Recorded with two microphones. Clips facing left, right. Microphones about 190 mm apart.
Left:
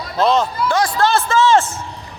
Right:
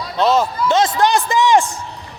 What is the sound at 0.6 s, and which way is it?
A man's voice, 20° right (ahead or behind).